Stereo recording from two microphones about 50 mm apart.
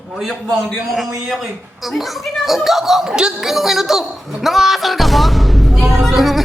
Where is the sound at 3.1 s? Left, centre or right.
Centre.